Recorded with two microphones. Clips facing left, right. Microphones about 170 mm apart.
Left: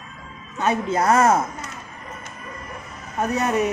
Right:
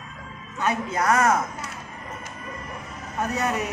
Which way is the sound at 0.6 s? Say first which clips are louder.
Left 4 dB; 25° left (ahead or behind).